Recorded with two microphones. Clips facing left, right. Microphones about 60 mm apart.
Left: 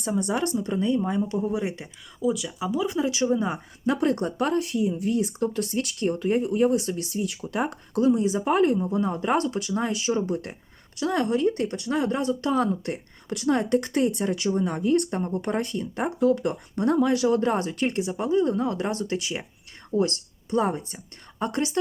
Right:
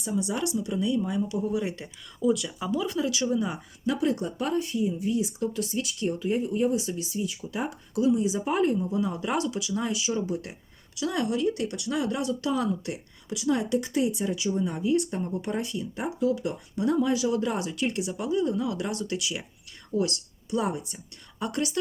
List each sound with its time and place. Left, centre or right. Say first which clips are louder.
0.0 s speech: left 3 dB; left
1.5 s speech: left 1 dB; left
2.1 s speech: right 1 dB; centre; by 3.9 s left
4.0 s speech: left 3 dB; left